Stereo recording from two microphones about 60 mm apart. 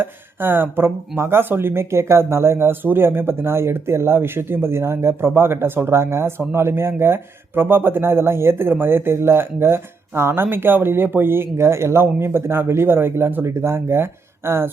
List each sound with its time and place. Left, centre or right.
0.0 s speech: right